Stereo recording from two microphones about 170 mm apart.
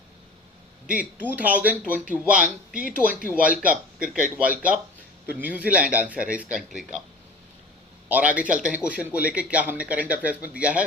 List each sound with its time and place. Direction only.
0.9 s speech: 10° right (ahead or behind)
8.1 s speech: 10° right (ahead or behind)